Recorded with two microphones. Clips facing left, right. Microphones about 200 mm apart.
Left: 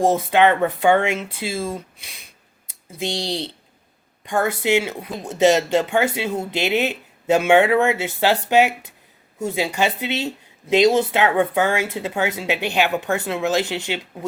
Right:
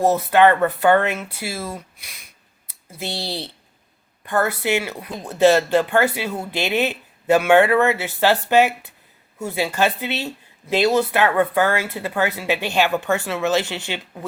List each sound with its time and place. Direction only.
0.1 s speech: 15° left (ahead or behind)
3.0 s speech: 15° left (ahead or behind)